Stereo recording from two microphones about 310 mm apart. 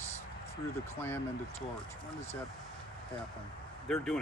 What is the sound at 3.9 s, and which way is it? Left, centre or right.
Speech, centre.